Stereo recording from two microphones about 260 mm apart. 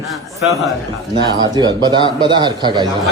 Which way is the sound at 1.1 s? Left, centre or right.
Centre.